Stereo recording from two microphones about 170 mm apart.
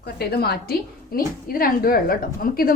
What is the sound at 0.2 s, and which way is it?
A woman's voice, 70° left (ahead or behind).